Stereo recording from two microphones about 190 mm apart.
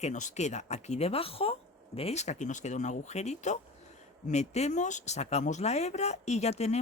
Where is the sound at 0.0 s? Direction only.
40° left (ahead or behind).